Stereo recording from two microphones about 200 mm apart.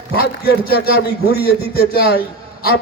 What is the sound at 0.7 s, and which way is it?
A man's voice, 50° left (ahead or behind).